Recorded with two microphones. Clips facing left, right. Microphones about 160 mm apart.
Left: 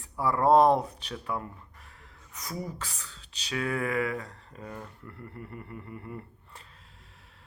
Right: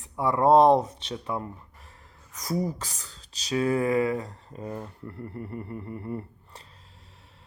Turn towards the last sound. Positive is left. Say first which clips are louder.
# right 7 dB
turn(degrees=-35)  # may be behind; listen again after turning